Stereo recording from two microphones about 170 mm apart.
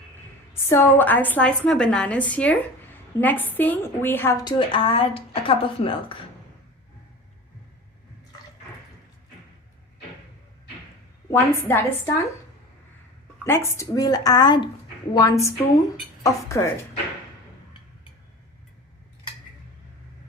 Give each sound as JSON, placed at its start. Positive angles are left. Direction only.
{"t": 0.7, "sound": "a woman's voice", "side_deg": 10}
{"t": 11.3, "sound": "a woman's voice", "side_deg": 15}
{"t": 13.4, "sound": "a woman's voice", "side_deg": 15}